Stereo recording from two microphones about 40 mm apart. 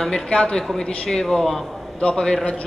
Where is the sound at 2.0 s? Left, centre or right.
Left.